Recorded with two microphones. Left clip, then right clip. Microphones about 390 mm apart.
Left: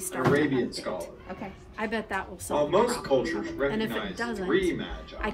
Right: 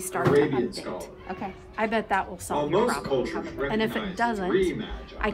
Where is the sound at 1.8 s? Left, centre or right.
Centre.